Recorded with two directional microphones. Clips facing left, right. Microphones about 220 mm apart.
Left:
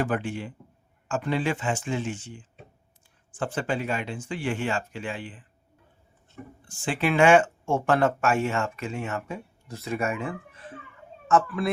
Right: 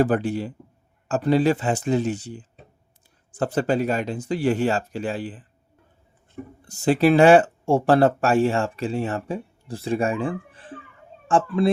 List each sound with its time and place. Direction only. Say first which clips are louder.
0.0 s speech: right 7 dB; 35° right (ahead or behind)
6.6 s speech: right 9 dB; 40° right (ahead or behind)